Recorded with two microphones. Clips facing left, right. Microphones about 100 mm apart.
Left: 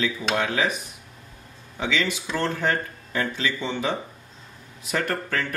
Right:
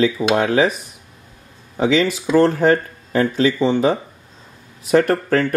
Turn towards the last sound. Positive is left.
turn(degrees=-40)  # may be behind; listen again after turning